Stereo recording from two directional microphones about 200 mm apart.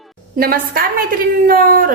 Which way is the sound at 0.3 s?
50° right (ahead or behind).